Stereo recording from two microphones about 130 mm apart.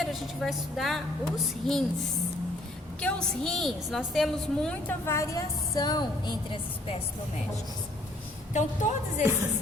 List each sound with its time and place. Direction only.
0.0 s a woman's voice: centre (ahead or behind)
3.0 s a woman's voice: 5° left (ahead or behind)
4.7 s a woman's voice: 15° left (ahead or behind); by 7.0 s 45° left (ahead or behind)
8.5 s a woman's voice: 65° left (ahead or behind)